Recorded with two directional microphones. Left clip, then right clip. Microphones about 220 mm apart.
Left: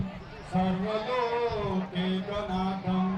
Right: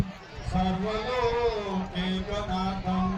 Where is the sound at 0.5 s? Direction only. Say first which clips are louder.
Right 1 dB; 45° right (ahead or behind).